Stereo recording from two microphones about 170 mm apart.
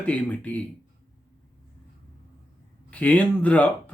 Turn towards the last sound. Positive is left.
turn(degrees=10)  # may be behind; listen again after turning